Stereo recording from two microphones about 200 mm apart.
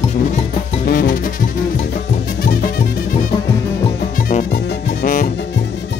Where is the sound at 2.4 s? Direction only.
50° left (ahead or behind).